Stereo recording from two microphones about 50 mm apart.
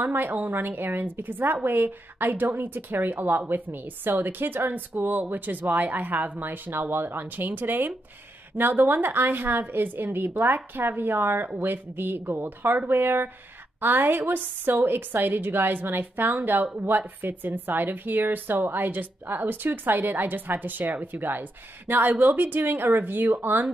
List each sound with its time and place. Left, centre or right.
0.0 s a woman's voice: right